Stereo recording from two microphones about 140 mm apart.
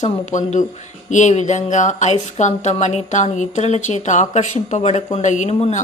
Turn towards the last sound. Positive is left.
turn(degrees=55)  # may be behind; listen again after turning